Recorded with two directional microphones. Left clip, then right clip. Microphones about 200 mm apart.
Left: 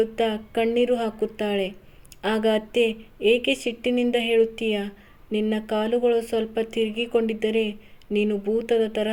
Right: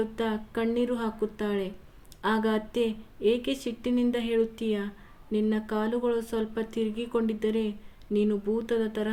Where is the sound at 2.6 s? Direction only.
45° right (ahead or behind).